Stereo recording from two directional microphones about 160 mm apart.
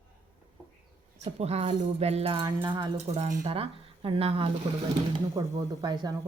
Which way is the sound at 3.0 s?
40° right (ahead or behind).